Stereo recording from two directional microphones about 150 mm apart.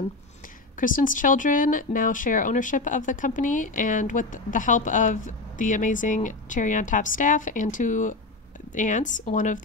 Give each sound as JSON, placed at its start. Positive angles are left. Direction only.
{"t": 0.7, "sound": "speech", "side_deg": 60}